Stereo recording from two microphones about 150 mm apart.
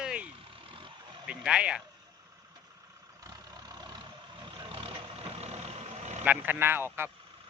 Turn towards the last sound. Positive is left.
turn(degrees=-15)  # may be behind; listen again after turning